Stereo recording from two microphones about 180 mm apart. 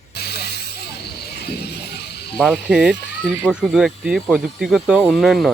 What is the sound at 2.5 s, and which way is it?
Speech, 10° right (ahead or behind).